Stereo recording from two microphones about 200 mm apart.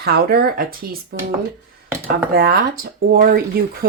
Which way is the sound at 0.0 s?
50° right (ahead or behind).